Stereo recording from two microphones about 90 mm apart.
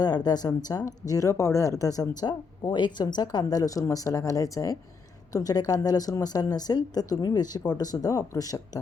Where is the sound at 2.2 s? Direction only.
55° left (ahead or behind).